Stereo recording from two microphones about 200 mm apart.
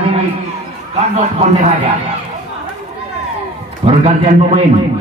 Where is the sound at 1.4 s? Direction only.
30° right (ahead or behind).